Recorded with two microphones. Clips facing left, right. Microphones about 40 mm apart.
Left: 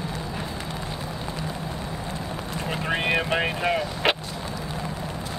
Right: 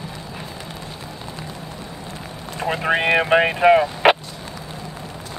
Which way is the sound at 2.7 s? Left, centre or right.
Right.